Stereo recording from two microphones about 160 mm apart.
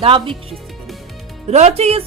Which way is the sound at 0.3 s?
Centre (ahead or behind).